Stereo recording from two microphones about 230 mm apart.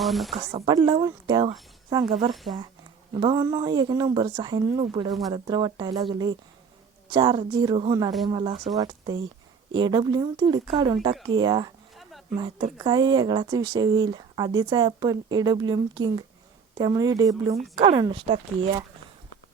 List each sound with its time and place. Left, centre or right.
0.0 s a woman's voice: centre
0.5 s speech: right
2.3 s a woman's voice: centre
3.2 s speech: centre